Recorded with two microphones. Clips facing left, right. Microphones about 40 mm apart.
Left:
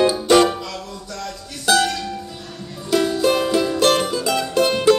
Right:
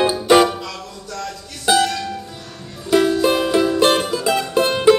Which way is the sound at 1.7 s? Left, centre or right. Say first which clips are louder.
Right 1 dB; centre.